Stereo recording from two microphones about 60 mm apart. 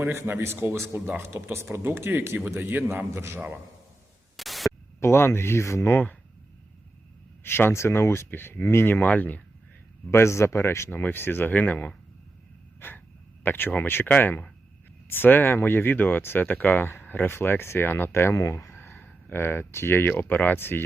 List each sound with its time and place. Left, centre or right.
0.0 s speech: right
3.2 s speech: right
4.4 s static: centre
4.9 s speech: left
7.4 s speech: left
10.1 s speech: left
12.8 s wheeze: left
13.4 s speech: left
18.3 s speech: left